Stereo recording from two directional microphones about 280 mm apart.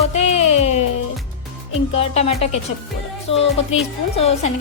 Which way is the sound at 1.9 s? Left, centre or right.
Left.